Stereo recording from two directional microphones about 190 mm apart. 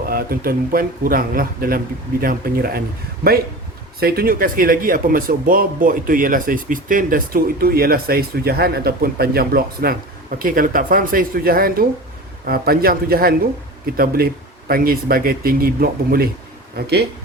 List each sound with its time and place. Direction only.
0.0 s speech: 50° right (ahead or behind)
4.0 s speech: 50° right (ahead or behind)